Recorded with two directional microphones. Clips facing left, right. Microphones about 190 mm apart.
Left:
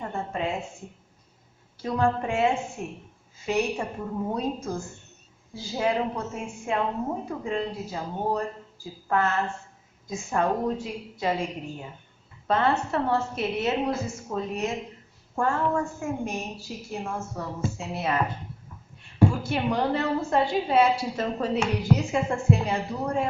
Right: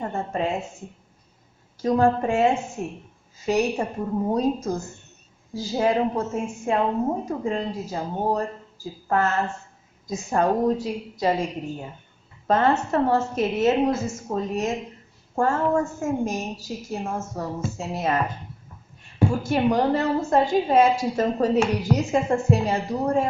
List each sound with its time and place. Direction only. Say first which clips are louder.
0.0 s a woman's voice: right 4 dB; 45° right (ahead or behind)
1.8 s a woman's voice: right 5 dB; 40° right (ahead or behind)
19.4 s a woman's voice: right 5 dB; 45° right (ahead or behind)